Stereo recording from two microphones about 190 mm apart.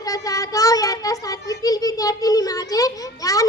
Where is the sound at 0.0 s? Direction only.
20° left (ahead or behind).